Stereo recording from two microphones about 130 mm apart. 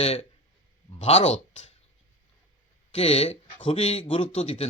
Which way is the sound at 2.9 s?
50° left (ahead or behind).